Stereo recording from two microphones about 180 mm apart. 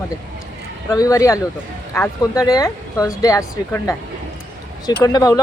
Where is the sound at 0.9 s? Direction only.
20° left (ahead or behind).